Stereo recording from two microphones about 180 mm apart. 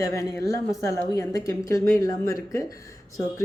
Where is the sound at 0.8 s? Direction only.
15° left (ahead or behind).